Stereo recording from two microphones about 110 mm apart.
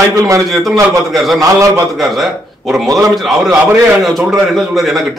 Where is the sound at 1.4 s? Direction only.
30° right (ahead or behind).